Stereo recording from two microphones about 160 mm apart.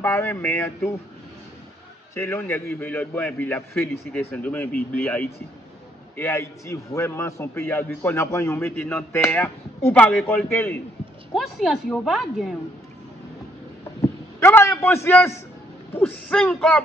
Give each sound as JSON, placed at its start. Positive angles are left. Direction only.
{"t": 0.0, "sound": "a man's voice", "side_deg": 10}
{"t": 2.1, "sound": "a man's voice", "side_deg": 15}
{"t": 11.3, "sound": "a woman's voice", "side_deg": 0}
{"t": 14.0, "sound": "a sound", "side_deg": 15}
{"t": 15.0, "sound": "a man's voice", "side_deg": 15}